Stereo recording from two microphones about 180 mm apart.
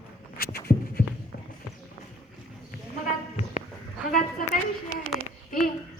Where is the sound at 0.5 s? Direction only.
55° left (ahead or behind).